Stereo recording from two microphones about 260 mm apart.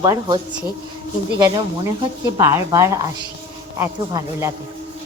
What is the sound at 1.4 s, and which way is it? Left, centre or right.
Speech, centre.